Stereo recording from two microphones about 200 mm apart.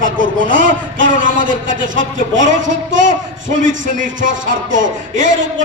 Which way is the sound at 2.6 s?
70° right (ahead or behind).